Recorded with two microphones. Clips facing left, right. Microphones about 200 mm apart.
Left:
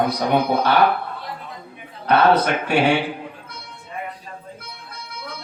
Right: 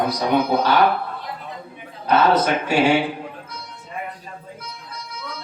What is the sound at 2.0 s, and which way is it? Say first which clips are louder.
Speech: left 1 dB; 60° left (ahead or behind).